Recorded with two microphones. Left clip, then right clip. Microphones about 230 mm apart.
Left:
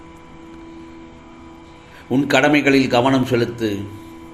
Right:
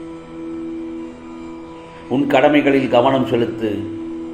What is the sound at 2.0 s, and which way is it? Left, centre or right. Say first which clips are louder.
Speech: right 2 dB; left.